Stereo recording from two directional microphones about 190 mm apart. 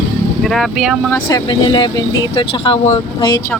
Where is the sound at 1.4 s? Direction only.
25° left (ahead or behind).